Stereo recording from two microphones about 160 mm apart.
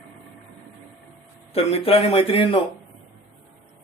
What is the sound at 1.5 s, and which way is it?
Speech, 40° left (ahead or behind).